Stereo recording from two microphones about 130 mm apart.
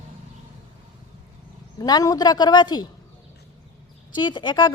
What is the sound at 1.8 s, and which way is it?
A woman's voice, 30° left (ahead or behind).